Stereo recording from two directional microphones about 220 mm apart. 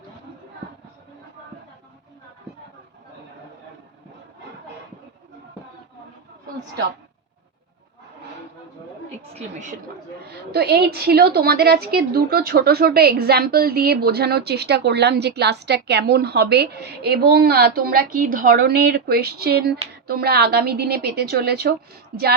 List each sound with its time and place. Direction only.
9.3 s a woman's voice: 35° right (ahead or behind)
10.5 s a woman's voice: 45° right (ahead or behind)